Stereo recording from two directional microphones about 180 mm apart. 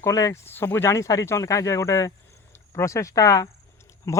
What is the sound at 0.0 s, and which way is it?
Speech, 20° left (ahead or behind).